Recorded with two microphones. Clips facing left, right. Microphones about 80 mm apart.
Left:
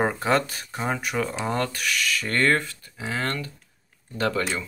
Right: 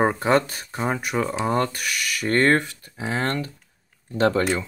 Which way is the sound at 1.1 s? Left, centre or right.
Centre.